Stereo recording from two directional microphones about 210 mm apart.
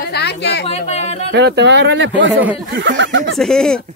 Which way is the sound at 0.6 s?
30° left (ahead or behind).